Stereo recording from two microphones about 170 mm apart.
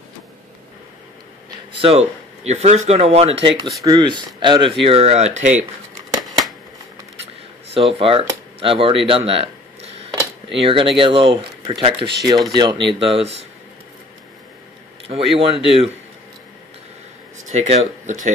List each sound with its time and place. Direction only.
1.8 s speech: 35° right (ahead or behind)
7.7 s speech: 35° right (ahead or behind)
15.0 s speech: 35° right (ahead or behind)
17.5 s speech: 40° right (ahead or behind)